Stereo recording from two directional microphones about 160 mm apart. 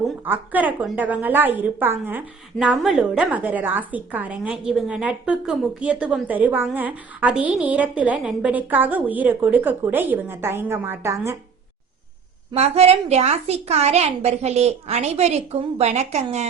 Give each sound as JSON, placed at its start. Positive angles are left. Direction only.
{"t": 0.3, "sound": "a woman's voice", "side_deg": -10}
{"t": 12.5, "sound": "a woman's voice", "side_deg": -40}